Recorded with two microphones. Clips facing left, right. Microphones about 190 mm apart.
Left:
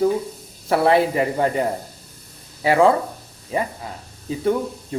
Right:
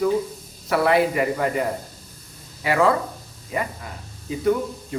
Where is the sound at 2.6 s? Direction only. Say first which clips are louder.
Left 4 dB; 30° left (ahead or behind).